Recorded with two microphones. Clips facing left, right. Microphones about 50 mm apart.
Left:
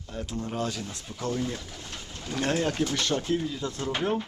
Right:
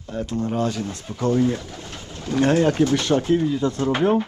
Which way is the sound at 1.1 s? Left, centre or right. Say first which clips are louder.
Right 8 dB; right.